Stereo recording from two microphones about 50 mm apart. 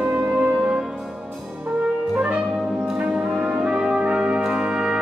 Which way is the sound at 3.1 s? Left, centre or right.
Centre.